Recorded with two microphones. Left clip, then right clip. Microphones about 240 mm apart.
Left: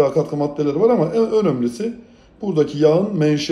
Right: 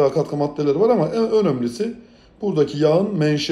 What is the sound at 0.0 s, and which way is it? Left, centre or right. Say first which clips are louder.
Speech: left 1 dB; centre.